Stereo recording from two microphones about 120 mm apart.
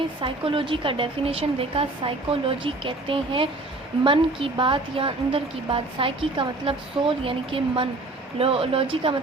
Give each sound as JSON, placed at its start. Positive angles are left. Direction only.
{"t": 0.2, "sound": "a woman's voice", "side_deg": -45}